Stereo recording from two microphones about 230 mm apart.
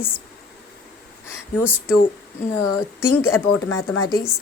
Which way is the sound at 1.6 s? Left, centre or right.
Centre.